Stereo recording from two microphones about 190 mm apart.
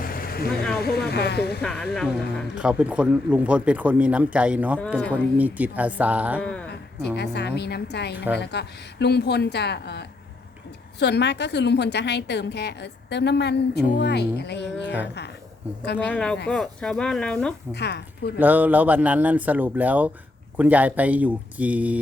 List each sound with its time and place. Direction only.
0.0 s a sound: 50° left (ahead or behind)
0.8 s a woman's voice: 55° left (ahead or behind)
1.6 s speech: 5° left (ahead or behind)
4.9 s speech: 5° left (ahead or behind)
5.4 s speech: 10° right (ahead or behind)
6.4 s speech: 5° left (ahead or behind)
7.2 s a woman's voice: 60° left (ahead or behind)
8.1 s speech: 10° right (ahead or behind)
8.4 s a woman's voice: 60° left (ahead or behind)
16.0 s speech: 5° left (ahead or behind)
17.7 s a woman's voice: 60° left (ahead or behind)
18.3 s speech: 10° right (ahead or behind)